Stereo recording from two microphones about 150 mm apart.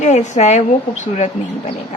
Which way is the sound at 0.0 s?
50° left (ahead or behind).